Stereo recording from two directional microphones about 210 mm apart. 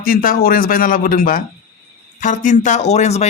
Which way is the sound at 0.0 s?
45° left (ahead or behind).